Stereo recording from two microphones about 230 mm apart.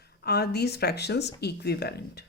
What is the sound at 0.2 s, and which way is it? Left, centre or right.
Speech, left.